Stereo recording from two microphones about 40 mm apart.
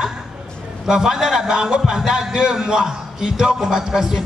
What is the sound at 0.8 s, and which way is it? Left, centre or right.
A man's voice, centre.